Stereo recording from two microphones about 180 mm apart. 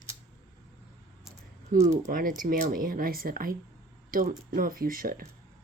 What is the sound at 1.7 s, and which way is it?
Speech, 50° right (ahead or behind).